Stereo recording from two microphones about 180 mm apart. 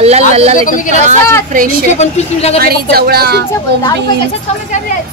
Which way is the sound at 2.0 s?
35° left (ahead or behind).